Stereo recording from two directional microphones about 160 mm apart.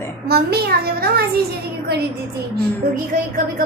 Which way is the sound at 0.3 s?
80° right.